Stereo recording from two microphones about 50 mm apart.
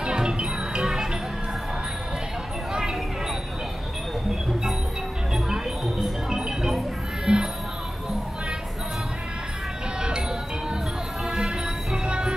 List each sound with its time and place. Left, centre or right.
0.0 s music: centre
2.7 s a sound: centre
5.3 s music: centre
7.3 s music: centre
11.2 s music: centre